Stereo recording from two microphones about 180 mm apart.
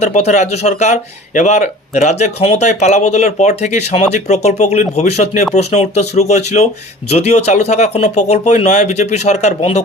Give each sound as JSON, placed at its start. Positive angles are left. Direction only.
{"t": 0.0, "sound": "speech", "side_deg": 40}